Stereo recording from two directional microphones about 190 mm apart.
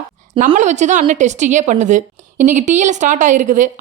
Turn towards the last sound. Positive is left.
turn(degrees=-40)  # may be behind; listen again after turning